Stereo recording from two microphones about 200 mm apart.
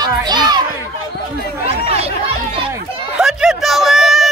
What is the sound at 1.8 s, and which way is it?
Chatter, 30° right (ahead or behind).